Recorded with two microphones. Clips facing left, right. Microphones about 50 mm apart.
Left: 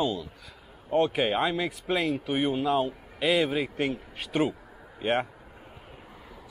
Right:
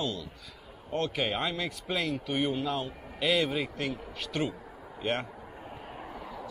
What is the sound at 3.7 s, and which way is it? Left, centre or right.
Speech, left.